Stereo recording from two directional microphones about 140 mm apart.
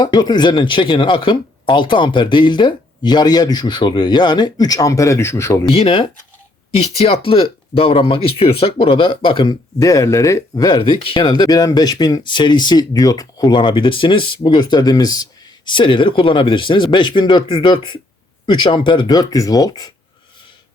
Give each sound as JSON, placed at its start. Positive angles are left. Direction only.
{"t": 0.0, "sound": "speech", "side_deg": 30}
{"t": 5.6, "sound": "speech", "side_deg": 40}